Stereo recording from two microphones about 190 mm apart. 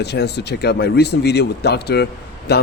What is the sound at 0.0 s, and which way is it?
Speech, 60° left (ahead or behind).